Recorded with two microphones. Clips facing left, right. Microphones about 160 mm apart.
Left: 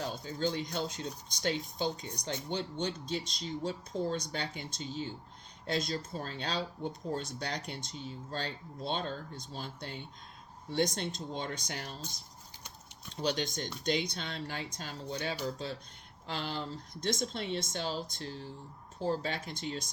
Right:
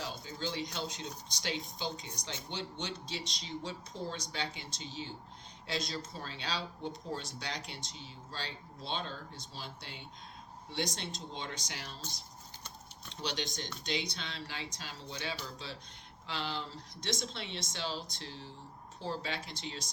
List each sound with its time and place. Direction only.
0.0 s speech: 45° left (ahead or behind)
13.2 s speech: 45° left (ahead or behind)